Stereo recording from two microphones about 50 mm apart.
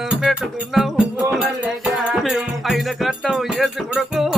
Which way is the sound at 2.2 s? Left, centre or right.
Centre.